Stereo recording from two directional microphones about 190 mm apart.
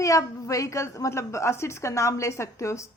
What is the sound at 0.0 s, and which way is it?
A woman's voice, 15° left (ahead or behind).